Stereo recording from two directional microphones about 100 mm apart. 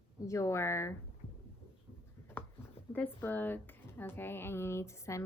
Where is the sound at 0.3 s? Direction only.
30° left (ahead or behind).